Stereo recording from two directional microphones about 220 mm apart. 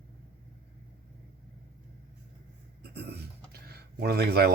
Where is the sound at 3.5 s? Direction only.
45° right (ahead or behind).